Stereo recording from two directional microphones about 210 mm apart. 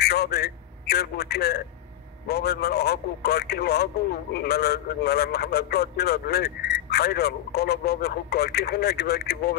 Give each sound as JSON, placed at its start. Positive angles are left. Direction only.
{"t": 0.0, "sound": "a man's voice", "side_deg": 50}